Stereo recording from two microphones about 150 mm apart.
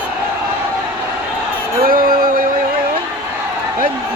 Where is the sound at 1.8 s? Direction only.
75° right (ahead or behind).